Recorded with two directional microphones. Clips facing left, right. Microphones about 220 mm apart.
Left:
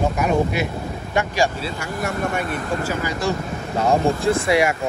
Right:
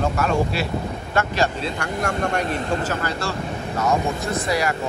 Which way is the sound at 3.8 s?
30° left (ahead or behind).